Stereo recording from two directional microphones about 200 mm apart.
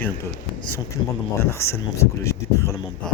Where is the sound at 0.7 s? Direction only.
10° left (ahead or behind).